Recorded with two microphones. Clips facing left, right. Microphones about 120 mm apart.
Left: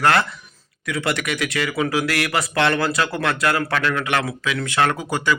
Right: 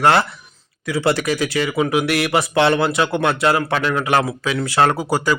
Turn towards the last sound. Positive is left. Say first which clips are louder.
# right 3 dB
turn(degrees=-35)  # may be behind; listen again after turning